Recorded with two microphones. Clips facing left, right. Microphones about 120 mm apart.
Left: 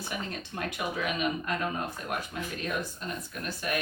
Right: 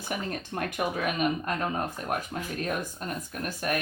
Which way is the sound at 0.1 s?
50° right (ahead or behind).